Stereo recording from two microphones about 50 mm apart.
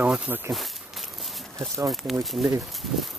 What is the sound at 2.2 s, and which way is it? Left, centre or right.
Speech, centre.